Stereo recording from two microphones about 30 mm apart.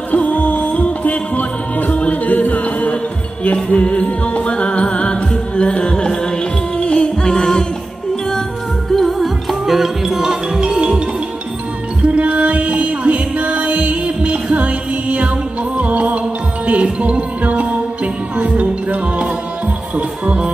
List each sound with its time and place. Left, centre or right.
0.1 s music: left
3.7 s music: left
8.9 s music: centre
10.1 s music: centre
12.0 s music: right
20.0 s music: right